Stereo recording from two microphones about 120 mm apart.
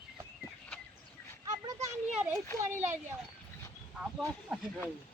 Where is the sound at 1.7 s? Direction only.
70° right (ahead or behind).